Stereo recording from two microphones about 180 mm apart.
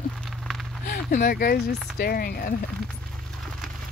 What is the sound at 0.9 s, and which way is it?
Speech, 50° left (ahead or behind).